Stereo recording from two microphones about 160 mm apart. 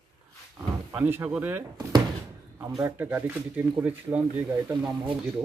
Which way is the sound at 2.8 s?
15° right (ahead or behind).